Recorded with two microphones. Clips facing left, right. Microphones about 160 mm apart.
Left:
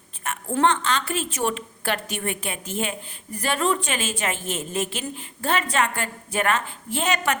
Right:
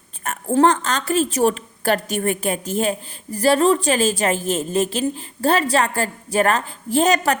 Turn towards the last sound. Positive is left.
turn(degrees=-35)  # may be behind; listen again after turning